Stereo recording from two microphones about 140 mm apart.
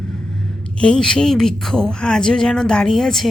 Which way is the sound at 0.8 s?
5° left (ahead or behind).